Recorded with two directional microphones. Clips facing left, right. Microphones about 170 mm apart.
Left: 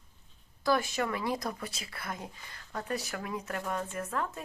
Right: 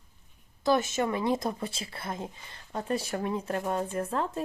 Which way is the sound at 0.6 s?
20° right (ahead or behind).